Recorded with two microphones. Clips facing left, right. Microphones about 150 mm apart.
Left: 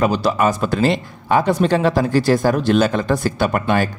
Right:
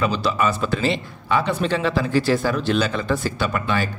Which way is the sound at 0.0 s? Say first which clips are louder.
Left 4 dB; 45° left (ahead or behind).